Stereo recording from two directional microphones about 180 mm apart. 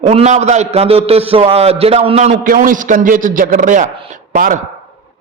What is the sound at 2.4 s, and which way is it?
A man's voice, 50° right (ahead or behind).